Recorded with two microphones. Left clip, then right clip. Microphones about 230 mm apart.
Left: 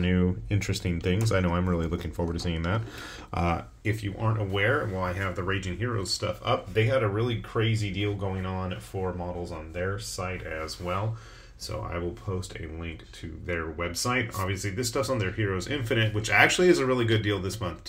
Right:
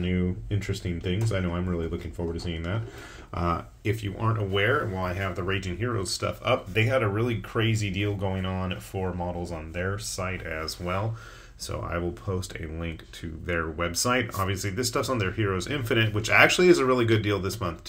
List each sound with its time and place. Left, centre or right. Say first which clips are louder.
0.0 s speech: left 2 dB; left
3.8 s speech: right 2 dB; centre; by 9.1 s right
10.1 s speech: right 2 dB; right
12.3 s speech: right 4 dB; right
13.5 s speech: right 3 dB; right